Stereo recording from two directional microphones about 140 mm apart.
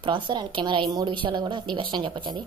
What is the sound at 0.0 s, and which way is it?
A woman's voice, 35° right (ahead or behind).